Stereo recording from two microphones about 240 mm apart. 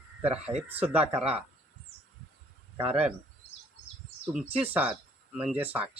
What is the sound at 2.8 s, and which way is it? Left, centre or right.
Speech, centre.